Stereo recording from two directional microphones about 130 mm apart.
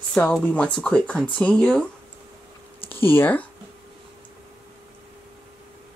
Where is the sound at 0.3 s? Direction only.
10° left (ahead or behind).